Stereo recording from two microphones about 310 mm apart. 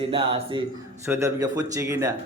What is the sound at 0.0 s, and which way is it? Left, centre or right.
Speech, centre.